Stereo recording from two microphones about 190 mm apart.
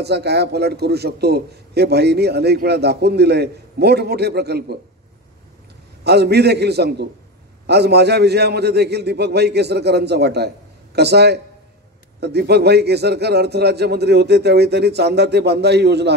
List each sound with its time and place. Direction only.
0.0 s a man's voice: 60° right (ahead or behind)
6.0 s a man's voice: 60° right (ahead or behind)